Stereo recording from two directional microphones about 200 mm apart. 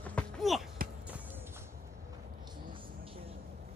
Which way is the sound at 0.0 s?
5° left (ahead or behind).